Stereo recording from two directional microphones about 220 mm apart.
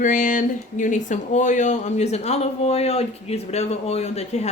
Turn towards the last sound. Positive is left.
turn(degrees=30)  # may be behind; listen again after turning